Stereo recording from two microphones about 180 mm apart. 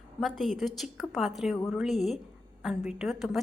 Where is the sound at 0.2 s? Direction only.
Centre (ahead or behind).